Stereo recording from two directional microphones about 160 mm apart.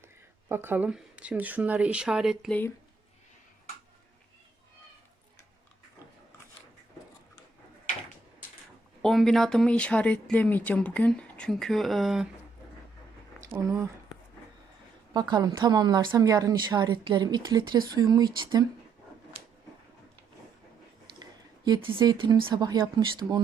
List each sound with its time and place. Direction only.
0.4 s speech: 15° right (ahead or behind)
2.5 s speech: 10° left (ahead or behind)
9.0 s speech: 5° left (ahead or behind)
13.6 s a woman's voice: 20° right (ahead or behind)
15.1 s a woman's voice: 25° right (ahead or behind)
21.2 s a sound: 25° right (ahead or behind)
21.9 s a woman's voice: 25° right (ahead or behind)